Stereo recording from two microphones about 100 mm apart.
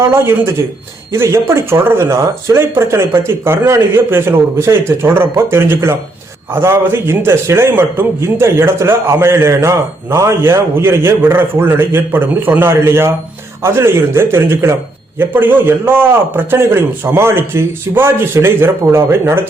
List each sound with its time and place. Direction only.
0.0 s a man's voice: 25° right (ahead or behind)